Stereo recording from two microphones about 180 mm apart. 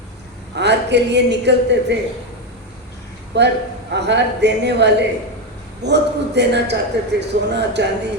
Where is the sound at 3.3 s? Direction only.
75° right (ahead or behind).